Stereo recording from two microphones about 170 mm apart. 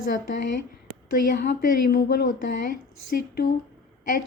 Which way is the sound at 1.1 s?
55° left (ahead or behind).